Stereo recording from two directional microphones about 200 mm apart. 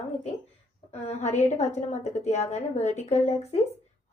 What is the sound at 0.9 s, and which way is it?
A woman's voice, 35° left (ahead or behind).